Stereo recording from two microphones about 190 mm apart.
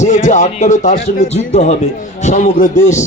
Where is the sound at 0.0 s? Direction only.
40° left (ahead or behind).